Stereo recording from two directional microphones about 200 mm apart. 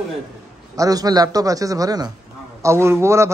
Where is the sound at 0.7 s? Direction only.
15° right (ahead or behind).